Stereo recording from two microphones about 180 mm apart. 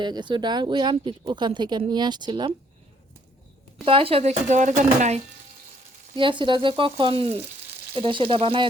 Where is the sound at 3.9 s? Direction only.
30° right (ahead or behind).